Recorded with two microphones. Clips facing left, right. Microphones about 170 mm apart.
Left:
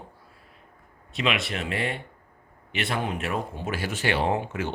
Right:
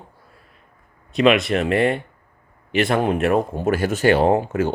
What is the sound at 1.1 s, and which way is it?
Speech, 45° right (ahead or behind).